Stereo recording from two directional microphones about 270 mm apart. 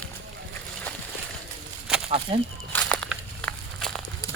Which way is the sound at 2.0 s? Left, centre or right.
Right.